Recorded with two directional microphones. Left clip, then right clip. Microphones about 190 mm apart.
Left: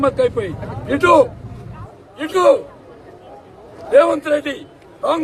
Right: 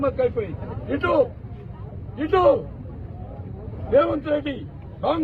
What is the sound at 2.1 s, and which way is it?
Speech, 30° left (ahead or behind).